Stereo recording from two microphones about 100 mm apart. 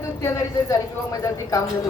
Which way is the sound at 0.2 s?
30° left (ahead or behind).